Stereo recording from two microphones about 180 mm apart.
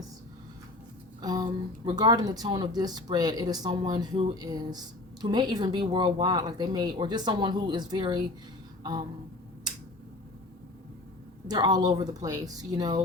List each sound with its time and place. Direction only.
1.2 s speech: 20° right (ahead or behind)
8.8 s a sound: 25° right (ahead or behind)
11.4 s speech: 25° right (ahead or behind)